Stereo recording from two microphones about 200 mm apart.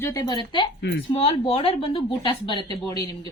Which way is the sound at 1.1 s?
30° left (ahead or behind).